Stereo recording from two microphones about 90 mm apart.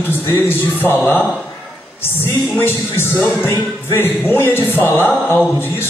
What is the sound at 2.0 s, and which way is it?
A woman's voice, 25° left (ahead or behind).